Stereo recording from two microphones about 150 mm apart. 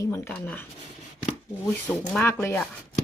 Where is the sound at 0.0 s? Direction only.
20° left (ahead or behind).